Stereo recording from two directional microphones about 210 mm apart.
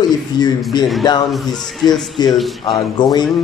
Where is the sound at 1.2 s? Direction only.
Centre (ahead or behind).